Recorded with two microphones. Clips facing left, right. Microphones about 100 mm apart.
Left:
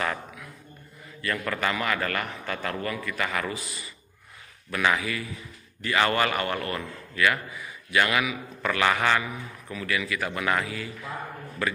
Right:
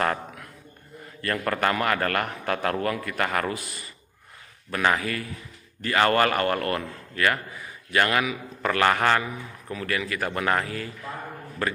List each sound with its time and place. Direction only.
0.0 s a sound: 50° right (ahead or behind)
1.2 s a man's voice: 45° right (ahead or behind)
4.6 s a man's voice: 40° right (ahead or behind)